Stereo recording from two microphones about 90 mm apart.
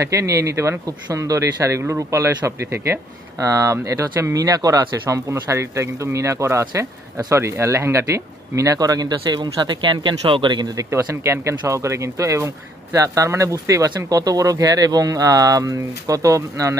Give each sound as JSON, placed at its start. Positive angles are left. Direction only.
{"t": 0.0, "sound": "speech", "side_deg": -35}
{"t": 10.8, "sound": "speech", "side_deg": -30}